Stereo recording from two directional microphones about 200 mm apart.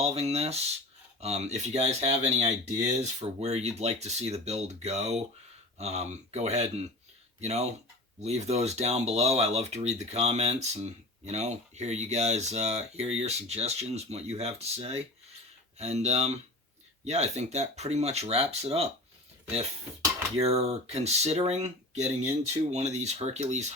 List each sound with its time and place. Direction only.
0.0 s speech: 30° right (ahead or behind)
20.4 s speech: 30° right (ahead or behind)